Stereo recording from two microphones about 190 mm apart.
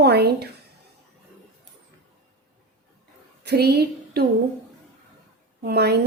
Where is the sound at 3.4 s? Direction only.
60° right (ahead or behind).